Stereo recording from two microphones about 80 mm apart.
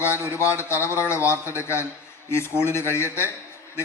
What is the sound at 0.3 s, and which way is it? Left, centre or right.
A man's voice, left.